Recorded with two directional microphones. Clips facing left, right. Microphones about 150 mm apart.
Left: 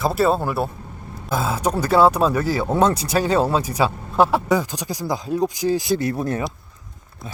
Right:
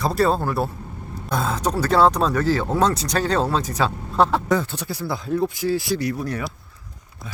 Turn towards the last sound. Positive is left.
turn(degrees=25)  # may be behind; listen again after turning